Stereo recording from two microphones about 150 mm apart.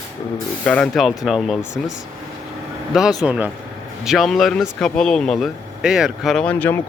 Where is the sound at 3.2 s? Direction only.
10° right (ahead or behind).